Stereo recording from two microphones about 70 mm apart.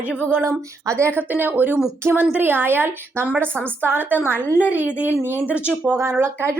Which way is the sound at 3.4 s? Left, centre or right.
Centre.